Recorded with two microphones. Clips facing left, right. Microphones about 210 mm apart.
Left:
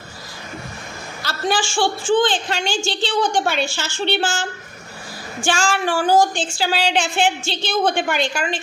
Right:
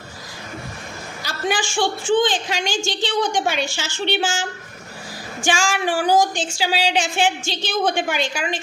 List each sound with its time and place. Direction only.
1.2 s a woman's voice: 15° right (ahead or behind)